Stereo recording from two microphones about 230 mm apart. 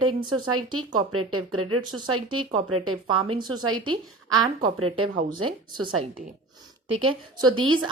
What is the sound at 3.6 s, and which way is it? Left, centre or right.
Speech, right.